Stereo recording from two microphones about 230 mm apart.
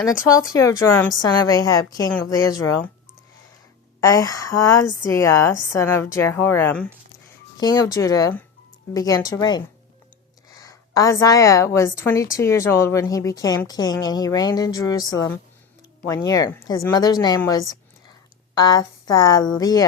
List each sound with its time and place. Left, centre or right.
0.3 s a woman's voice: centre
4.0 s a woman's voice: centre